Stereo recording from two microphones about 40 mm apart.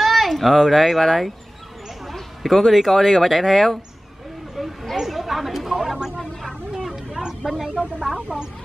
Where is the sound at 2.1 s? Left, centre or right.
Centre.